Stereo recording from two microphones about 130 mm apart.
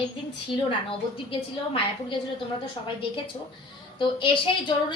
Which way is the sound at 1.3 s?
40° left (ahead or behind).